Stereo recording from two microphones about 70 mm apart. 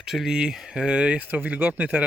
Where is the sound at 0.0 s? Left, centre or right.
Centre.